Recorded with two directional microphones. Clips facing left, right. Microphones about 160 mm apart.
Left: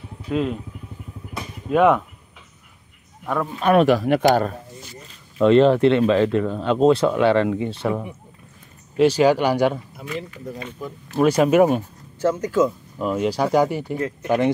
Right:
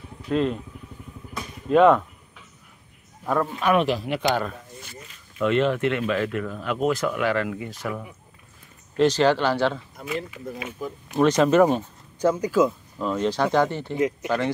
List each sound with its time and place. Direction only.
0.3 s speech: 5° left (ahead or behind)
1.7 s speech: 5° left (ahead or behind)
3.7 s speech: 50° left (ahead or behind)
5.4 s speech: 30° left (ahead or behind)
8.9 s speech: 10° left (ahead or behind)
10.0 s speech: 5° right (ahead or behind)
11.1 s speech: 10° left (ahead or behind)
12.2 s speech: 10° right (ahead or behind)
13.0 s speech: 10° left (ahead or behind)